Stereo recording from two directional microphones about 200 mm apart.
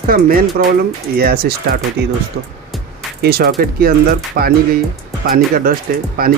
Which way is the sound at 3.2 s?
50° right (ahead or behind).